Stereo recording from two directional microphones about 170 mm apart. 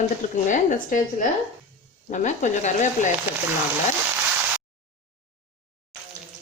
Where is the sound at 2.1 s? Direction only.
45° left (ahead or behind).